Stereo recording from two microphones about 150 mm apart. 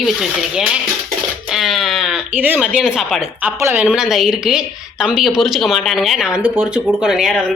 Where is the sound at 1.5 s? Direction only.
Centre (ahead or behind).